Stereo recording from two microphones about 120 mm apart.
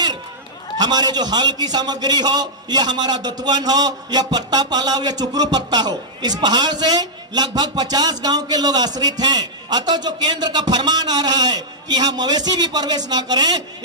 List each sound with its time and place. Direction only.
0.7 s a man's voice: 35° right (ahead or behind)